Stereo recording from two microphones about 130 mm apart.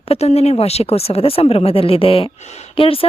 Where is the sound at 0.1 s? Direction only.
55° left (ahead or behind).